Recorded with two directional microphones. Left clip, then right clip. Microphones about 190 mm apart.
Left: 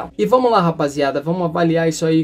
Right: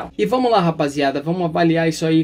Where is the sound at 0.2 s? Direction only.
10° right (ahead or behind).